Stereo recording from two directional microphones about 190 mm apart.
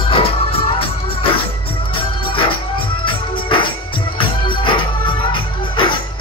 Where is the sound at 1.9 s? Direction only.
25° left (ahead or behind).